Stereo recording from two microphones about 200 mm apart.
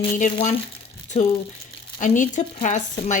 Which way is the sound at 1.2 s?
35° left (ahead or behind).